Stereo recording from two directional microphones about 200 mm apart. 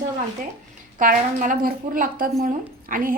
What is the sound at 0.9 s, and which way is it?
A woman's voice, 40° right (ahead or behind).